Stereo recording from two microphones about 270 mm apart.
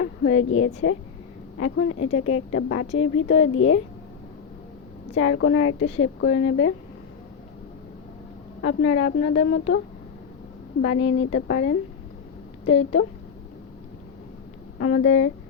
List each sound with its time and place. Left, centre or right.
0.0 s a sound: left
0.3 s a woman's voice: left
2.5 s a woman's voice: left
3.2 s a woman's voice: left
5.1 s a woman's voice: left
8.6 s a woman's voice: left
10.8 s a woman's voice: left
11.4 s a woman's voice: left
14.8 s a woman's voice: left